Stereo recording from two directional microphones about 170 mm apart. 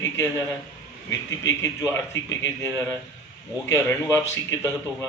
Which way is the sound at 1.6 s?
15° left (ahead or behind).